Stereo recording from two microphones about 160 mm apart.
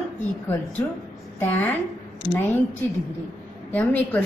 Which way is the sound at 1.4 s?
10° left (ahead or behind).